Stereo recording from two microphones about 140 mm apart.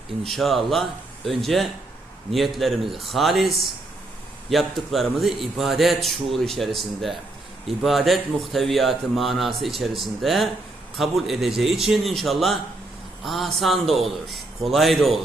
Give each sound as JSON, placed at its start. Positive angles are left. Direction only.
{"t": 0.3, "sound": "a man's voice", "side_deg": 0}